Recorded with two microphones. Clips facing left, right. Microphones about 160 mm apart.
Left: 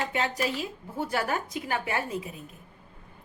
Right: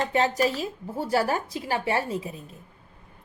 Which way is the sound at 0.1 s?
40° right (ahead or behind).